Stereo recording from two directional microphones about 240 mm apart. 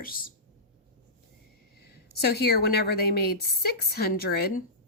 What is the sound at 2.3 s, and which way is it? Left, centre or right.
A woman's voice, left.